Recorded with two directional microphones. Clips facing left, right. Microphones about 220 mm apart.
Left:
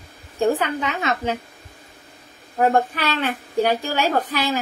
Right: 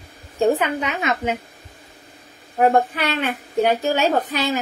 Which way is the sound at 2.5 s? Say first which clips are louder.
Right 2 dB; 15° right (ahead or behind).